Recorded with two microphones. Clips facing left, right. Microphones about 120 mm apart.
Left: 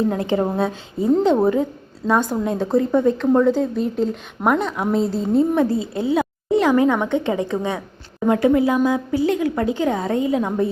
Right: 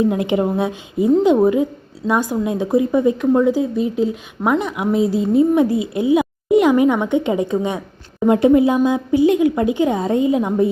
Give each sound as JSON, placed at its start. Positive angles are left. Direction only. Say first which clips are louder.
{"t": 0.0, "sound": "a woman's voice", "louder": "right 3 dB", "side_deg": -15}